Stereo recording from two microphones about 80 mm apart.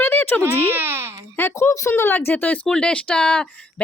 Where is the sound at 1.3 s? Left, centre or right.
Left.